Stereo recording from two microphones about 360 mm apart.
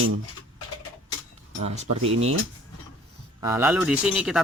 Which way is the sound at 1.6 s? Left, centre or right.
Centre.